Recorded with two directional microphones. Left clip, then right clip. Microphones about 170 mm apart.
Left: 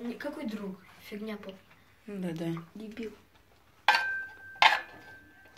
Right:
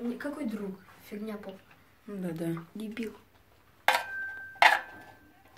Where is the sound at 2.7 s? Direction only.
35° right (ahead or behind).